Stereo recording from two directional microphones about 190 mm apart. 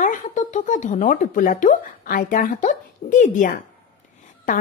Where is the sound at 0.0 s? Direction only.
40° left (ahead or behind).